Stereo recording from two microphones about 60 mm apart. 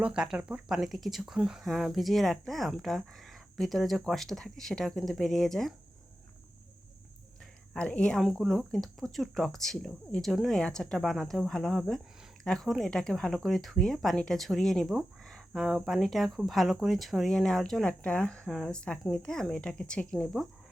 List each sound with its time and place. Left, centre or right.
0.0 s speech: centre
0.8 s speech: centre
7.8 s speech: centre
8.2 s speech: centre
15.2 s a sound: centre
15.6 s speech: centre
17.8 s speech: centre